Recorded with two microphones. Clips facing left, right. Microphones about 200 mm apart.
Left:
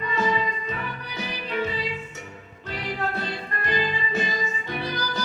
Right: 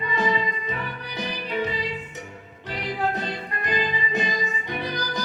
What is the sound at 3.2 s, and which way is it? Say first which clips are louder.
Music: right 1 dB; 15° right (ahead or behind).